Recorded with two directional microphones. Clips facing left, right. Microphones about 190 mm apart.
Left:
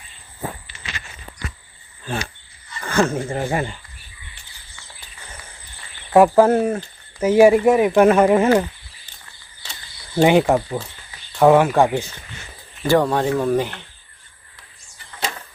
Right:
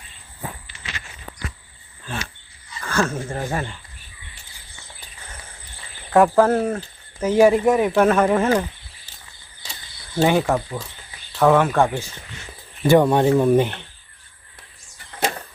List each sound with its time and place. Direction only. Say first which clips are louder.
2.0 s wild animals: left 4 dB; 35° left (ahead or behind)
2.8 s speech: left 4 dB; 15° left (ahead or behind)
6.1 s speech: left 3 dB; 10° left (ahead or behind)
10.2 s speech: left 4 dB; 15° left (ahead or behind)
11.3 s speech: left 3 dB; 10° left (ahead or behind)
12.8 s speech: right 2 dB; 15° right (ahead or behind)